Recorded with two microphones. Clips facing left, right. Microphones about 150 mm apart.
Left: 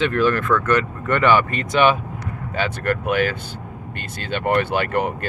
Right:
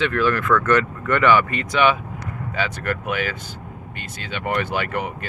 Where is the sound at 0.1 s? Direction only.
25° left (ahead or behind).